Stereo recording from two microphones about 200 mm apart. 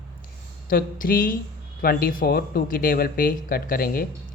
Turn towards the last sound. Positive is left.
turn(degrees=45)  # may be behind; listen again after turning